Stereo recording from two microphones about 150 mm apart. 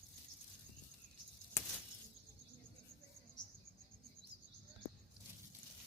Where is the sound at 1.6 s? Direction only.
20° left (ahead or behind).